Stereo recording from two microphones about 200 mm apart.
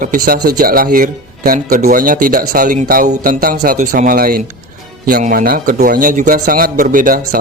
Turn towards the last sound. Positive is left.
turn(degrees=-45)  # may be behind; listen again after turning